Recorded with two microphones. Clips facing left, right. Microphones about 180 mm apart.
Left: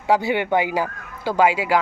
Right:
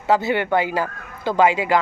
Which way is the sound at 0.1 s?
15° left (ahead or behind).